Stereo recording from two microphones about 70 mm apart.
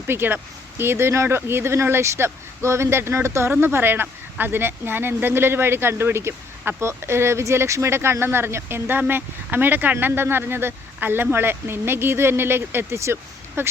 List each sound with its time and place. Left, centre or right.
0.1 s speech: right